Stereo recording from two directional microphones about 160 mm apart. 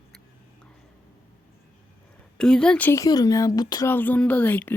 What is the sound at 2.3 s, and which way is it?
Speech, 5° left (ahead or behind).